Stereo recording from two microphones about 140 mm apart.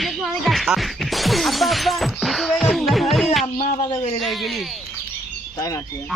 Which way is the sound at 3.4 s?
45° left (ahead or behind).